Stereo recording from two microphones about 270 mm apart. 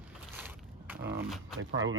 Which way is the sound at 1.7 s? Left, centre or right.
Right.